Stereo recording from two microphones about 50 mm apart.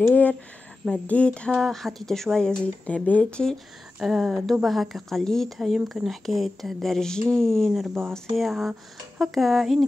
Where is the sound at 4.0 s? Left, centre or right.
Centre.